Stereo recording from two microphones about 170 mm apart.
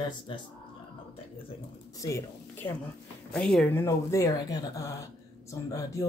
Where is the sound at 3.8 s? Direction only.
15° left (ahead or behind).